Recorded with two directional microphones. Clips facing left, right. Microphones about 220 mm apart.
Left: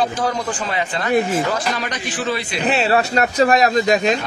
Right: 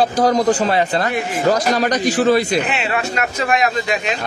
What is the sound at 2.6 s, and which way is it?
Speech, 40° left (ahead or behind).